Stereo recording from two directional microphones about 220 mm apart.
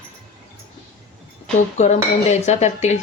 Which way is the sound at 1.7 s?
30° left (ahead or behind).